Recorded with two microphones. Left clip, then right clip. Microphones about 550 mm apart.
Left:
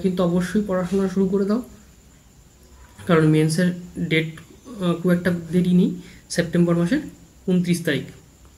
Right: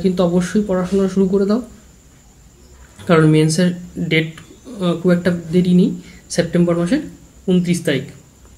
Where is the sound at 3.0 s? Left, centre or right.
Left.